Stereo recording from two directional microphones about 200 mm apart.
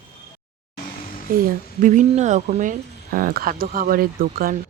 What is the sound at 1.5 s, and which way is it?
Speech, 40° right (ahead or behind).